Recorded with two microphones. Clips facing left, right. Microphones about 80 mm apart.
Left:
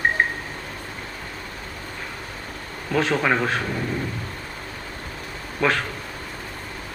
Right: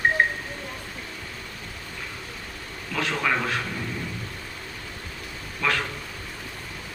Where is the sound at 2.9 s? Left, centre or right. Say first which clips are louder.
Left 5 dB; left.